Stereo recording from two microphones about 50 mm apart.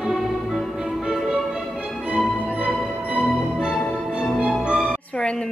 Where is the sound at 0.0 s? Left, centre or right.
Centre.